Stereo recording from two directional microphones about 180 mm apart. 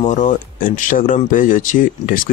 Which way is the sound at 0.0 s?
45° left (ahead or behind).